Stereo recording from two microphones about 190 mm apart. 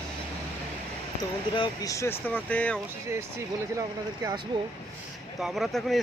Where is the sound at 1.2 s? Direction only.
20° left (ahead or behind).